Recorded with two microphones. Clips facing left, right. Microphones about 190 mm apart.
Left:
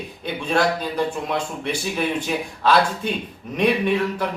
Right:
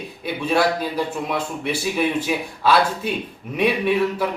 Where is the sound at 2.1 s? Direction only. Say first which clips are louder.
Right 2 dB; 5° right (ahead or behind).